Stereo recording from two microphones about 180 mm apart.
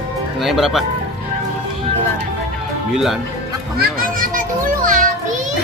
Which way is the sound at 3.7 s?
50° right (ahead or behind).